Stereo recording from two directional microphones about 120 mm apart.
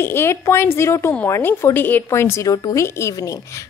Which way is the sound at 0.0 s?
20° left (ahead or behind).